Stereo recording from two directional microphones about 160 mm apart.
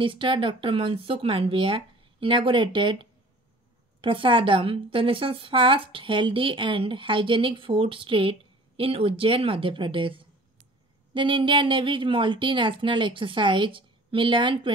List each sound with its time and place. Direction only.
0.0 s a woman's voice: 30° right (ahead or behind)